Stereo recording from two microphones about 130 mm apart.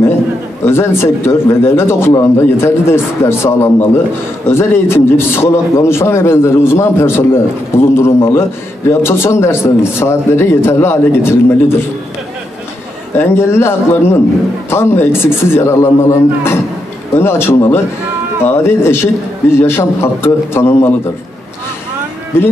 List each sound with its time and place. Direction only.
0.7 s a man's voice: 20° left (ahead or behind)
13.1 s a man's voice: 20° left (ahead or behind)
22.3 s a man's voice: 20° left (ahead or behind)